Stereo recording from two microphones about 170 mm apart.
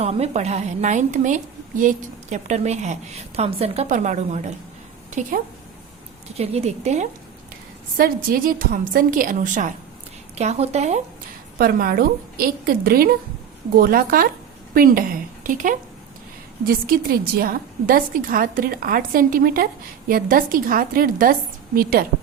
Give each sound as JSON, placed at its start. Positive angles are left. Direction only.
{"t": 0.0, "sound": "a woman's voice", "side_deg": -40}
{"t": 6.3, "sound": "a woman's voice", "side_deg": -35}
{"t": 7.9, "sound": "a woman's voice", "side_deg": -60}
{"t": 10.3, "sound": "a woman's voice", "side_deg": -40}
{"t": 11.5, "sound": "a woman's voice", "side_deg": -60}